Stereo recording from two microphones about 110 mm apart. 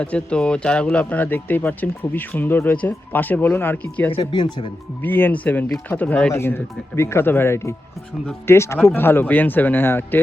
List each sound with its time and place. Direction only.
0.0 s speech: 10° left (ahead or behind)
4.2 s speech: 40° left (ahead or behind)
5.0 s speech: 15° left (ahead or behind)